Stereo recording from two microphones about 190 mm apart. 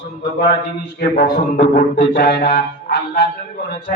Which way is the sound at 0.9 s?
55° left (ahead or behind).